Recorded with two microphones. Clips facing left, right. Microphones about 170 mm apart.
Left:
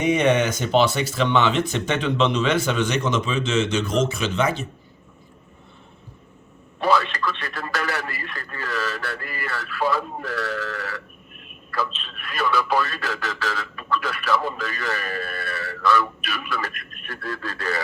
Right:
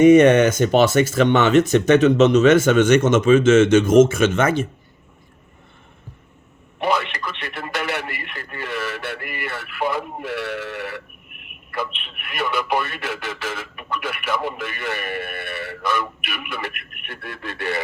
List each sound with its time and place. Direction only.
0.0 s speech: 50° right (ahead or behind)
6.7 s a man's voice: 20° right (ahead or behind)